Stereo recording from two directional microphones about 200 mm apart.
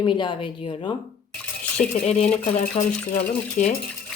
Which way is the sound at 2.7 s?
40° left (ahead or behind).